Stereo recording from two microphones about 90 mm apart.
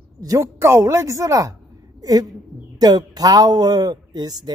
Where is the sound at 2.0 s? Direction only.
45° right (ahead or behind).